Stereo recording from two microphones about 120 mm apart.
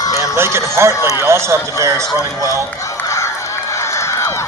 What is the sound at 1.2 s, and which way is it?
Speech, 20° right (ahead or behind).